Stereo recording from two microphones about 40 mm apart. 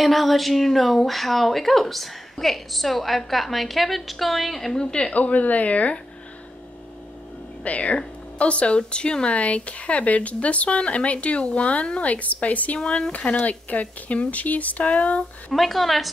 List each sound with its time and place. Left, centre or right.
0.0 s speech: centre
4.7 s speech: left
5.1 s speech: left
7.6 s speech: left
12.8 s speech: centre
13.2 s speech: left
15.5 s speech: centre